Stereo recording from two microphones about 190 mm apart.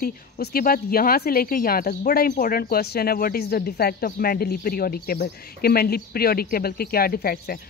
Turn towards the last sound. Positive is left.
turn(degrees=50)  # may be behind; listen again after turning